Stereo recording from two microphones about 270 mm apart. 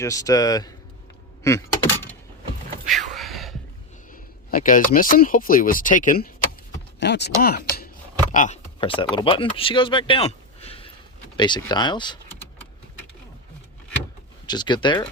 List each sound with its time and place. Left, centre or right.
0.0 s speech: centre
1.5 s a sound: centre
2.9 s a sound: centre
4.1 s speech: left
7.0 s chopping: left
8.3 s speech: left; by 12.5 s centre
14.4 s speech: centre